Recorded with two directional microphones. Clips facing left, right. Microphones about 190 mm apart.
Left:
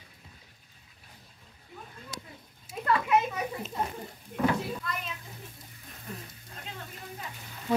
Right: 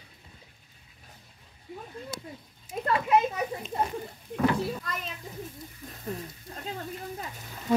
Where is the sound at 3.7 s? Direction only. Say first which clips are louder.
Right 4 dB; 55° right (ahead or behind).